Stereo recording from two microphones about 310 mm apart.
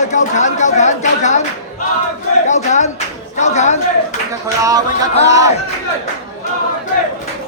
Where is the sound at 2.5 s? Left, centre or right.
Left.